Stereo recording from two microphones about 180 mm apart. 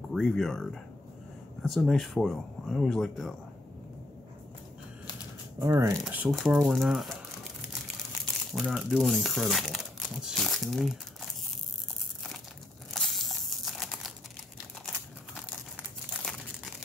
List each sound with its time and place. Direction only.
0.1 s speech: centre (ahead or behind)
5.6 s speech: 15° right (ahead or behind)
6.0 s speech: 5° right (ahead or behind)
8.5 s speech: centre (ahead or behind)
12.9 s crumpling: centre (ahead or behind)